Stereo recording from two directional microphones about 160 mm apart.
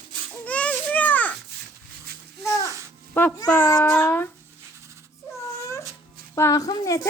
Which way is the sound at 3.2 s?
10° left (ahead or behind).